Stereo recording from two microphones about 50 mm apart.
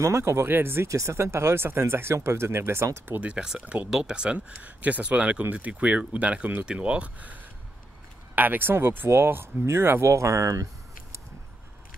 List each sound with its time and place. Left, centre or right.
0.0 s speech: right
0.8 s speech: right
3.2 s speech: right
8.4 s speech: right